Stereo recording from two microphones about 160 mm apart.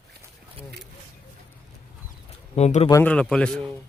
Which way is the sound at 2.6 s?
45° left (ahead or behind).